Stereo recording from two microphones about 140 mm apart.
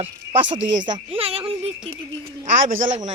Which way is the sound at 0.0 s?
35° right (ahead or behind).